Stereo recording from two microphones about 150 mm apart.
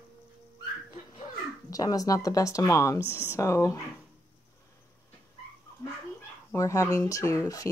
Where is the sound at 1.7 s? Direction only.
25° left (ahead or behind).